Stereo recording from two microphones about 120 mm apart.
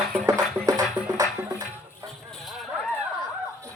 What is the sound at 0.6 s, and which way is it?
Music, 30° right (ahead or behind).